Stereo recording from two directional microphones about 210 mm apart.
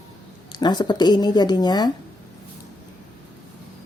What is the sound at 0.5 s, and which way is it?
Speech, 20° left (ahead or behind).